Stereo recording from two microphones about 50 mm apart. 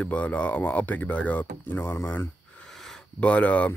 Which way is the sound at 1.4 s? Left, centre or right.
Left.